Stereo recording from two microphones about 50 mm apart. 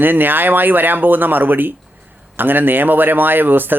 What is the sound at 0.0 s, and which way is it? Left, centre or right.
Speech, right.